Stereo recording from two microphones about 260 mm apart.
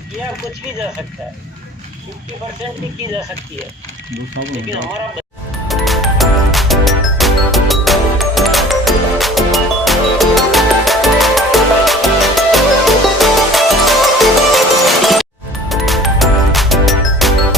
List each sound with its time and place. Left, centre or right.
4.4 s speech: right
5.6 s music: centre